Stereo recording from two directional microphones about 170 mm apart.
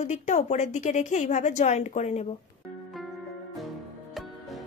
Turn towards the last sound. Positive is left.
turn(degrees=0)  # may be behind; listen again after turning